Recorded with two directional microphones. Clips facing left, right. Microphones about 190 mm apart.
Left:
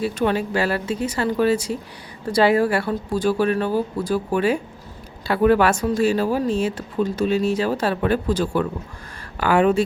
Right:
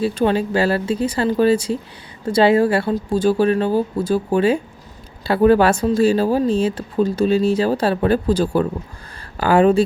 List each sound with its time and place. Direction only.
0.0 s speech: 30° right (ahead or behind)